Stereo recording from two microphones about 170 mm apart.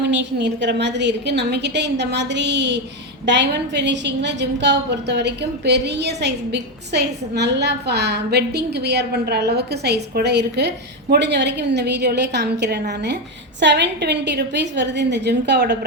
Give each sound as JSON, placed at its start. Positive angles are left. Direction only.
{"t": 0.1, "sound": "a woman's voice", "side_deg": -90}